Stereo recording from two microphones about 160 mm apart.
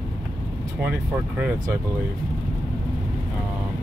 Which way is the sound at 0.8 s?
10° right (ahead or behind).